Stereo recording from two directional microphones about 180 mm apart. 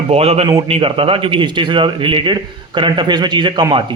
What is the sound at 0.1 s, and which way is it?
A man's voice, 35° right (ahead or behind).